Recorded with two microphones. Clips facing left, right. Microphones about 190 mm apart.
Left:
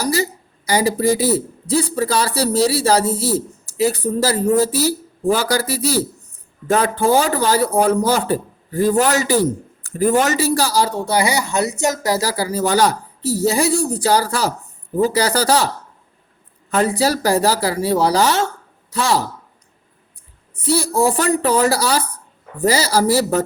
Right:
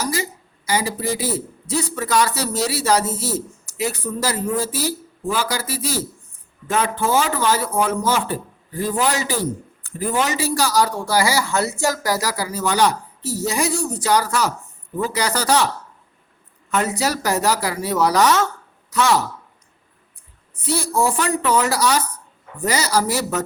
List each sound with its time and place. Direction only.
0.0 s speech: 35° left (ahead or behind)
20.7 s speech: 35° left (ahead or behind)